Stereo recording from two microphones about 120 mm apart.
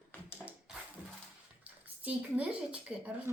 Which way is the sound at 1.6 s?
10° right (ahead or behind).